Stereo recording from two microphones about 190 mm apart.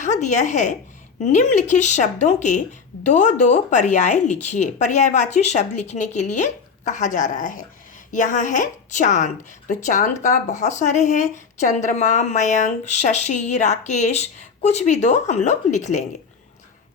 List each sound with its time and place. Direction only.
0.0 s a woman's voice: 40° left (ahead or behind)